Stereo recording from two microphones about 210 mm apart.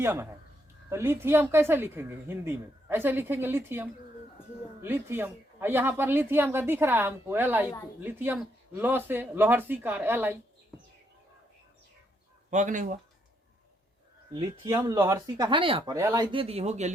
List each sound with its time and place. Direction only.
0.0 s a woman's voice: 10° right (ahead or behind)
12.5 s speech: 35° right (ahead or behind)
14.7 s a woman's voice: 15° right (ahead or behind)
16.0 s a woman's voice: 15° right (ahead or behind)
16.3 s speech: 25° right (ahead or behind)